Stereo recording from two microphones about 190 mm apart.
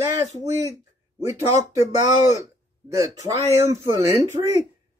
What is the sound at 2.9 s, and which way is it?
Speech, 15° right (ahead or behind).